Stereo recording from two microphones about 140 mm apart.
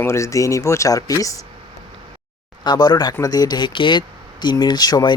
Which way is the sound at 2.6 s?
30° left (ahead or behind).